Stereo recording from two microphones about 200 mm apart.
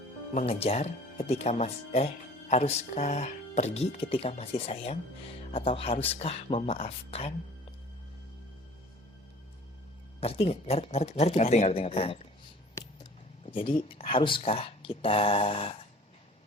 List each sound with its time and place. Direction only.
0.3 s speech: 30° left (ahead or behind)
10.2 s speech: 30° left (ahead or behind)